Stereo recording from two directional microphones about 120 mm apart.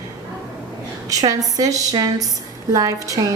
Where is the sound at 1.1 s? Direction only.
30° right (ahead or behind).